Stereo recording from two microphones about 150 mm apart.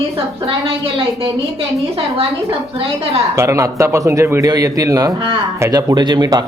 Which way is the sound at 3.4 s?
20° right (ahead or behind).